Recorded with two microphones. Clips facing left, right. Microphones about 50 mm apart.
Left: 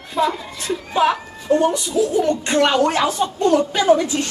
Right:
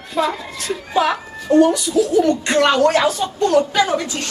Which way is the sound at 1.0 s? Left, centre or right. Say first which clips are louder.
Left 3 dB; left.